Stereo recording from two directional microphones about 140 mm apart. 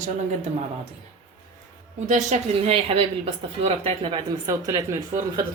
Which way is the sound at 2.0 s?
60° right (ahead or behind).